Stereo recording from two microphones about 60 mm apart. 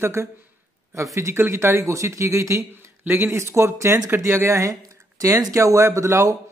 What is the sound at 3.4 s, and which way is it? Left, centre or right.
Speech, right.